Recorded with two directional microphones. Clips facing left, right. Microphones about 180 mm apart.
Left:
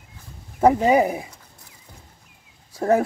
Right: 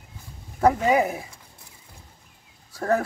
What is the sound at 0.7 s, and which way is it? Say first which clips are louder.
Speech: left 3 dB; 20° left (ahead or behind).